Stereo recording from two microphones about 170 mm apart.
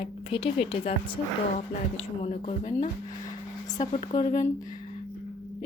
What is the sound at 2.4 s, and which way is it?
Speech, 40° left (ahead or behind).